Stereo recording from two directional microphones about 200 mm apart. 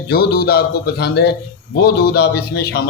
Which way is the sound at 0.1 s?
50° left (ahead or behind).